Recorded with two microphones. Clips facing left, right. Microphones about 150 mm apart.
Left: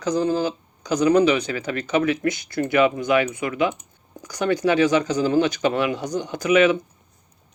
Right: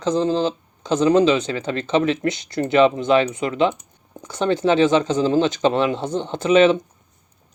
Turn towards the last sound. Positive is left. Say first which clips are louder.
# right 3 dB
turn(degrees=-30)  # may be behind; listen again after turning